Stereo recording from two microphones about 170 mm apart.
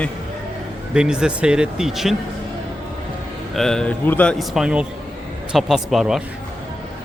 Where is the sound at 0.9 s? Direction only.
5° right (ahead or behind).